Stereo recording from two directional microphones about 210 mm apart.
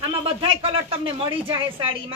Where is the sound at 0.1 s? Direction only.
25° right (ahead or behind).